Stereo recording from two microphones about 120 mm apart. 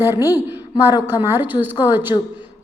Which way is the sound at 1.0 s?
20° right (ahead or behind).